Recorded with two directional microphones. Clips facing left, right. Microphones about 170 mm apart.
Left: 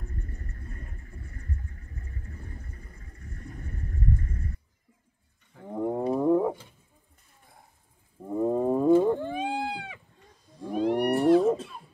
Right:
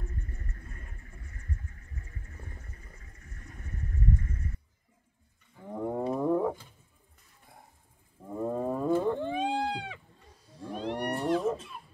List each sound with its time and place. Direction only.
1.1 s a sound: 35° left (ahead or behind)
5.7 s wild animals: 10° left (ahead or behind)
8.2 s wild animals: 15° left (ahead or behind)